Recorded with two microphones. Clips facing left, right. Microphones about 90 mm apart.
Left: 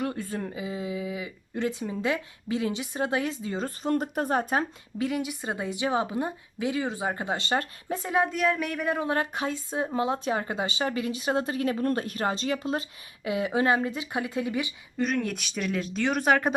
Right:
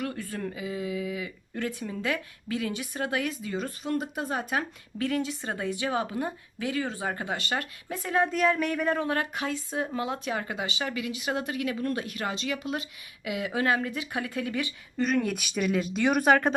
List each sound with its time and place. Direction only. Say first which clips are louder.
0.0 s speech: left 2 dB; 25° left (ahead or behind)
3.8 s speech: left 5 dB; 45° left (ahead or behind)
4.9 s speech: even; 15° left (ahead or behind)
8.1 s speech: right 1 dB; 5° left (ahead or behind)
9.0 s speech: left 1 dB; 25° left (ahead or behind)
14.9 s speech: right 1 dB; centre (ahead or behind)